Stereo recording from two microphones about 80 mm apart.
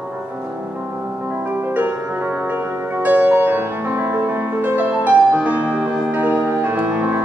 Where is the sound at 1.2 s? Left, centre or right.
Right.